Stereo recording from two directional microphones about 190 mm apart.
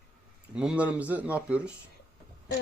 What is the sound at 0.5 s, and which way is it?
Speech, 5° right (ahead or behind).